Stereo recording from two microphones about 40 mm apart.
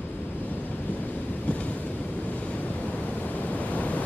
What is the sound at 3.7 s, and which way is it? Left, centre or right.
Waves, left.